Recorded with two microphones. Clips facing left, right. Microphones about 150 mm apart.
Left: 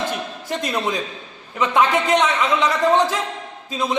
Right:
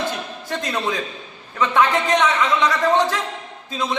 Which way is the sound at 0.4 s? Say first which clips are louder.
Left 1 dB; 15° left (ahead or behind).